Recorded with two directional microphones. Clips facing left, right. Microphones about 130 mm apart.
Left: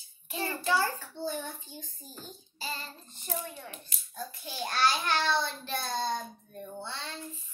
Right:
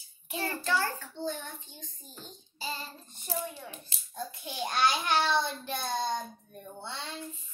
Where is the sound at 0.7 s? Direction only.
10° left (ahead or behind).